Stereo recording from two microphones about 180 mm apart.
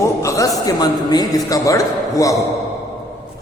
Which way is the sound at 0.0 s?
15° left (ahead or behind).